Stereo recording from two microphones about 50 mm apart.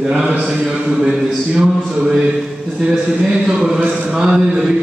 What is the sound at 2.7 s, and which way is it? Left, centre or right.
A man's voice, centre.